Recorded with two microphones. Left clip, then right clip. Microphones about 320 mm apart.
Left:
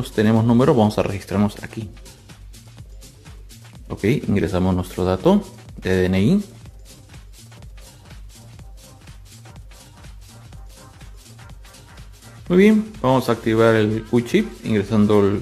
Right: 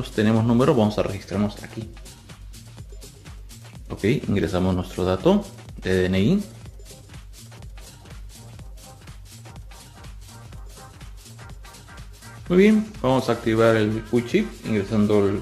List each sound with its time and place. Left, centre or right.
0.0 s speech: centre
3.8 s speech: centre
12.4 s speech: centre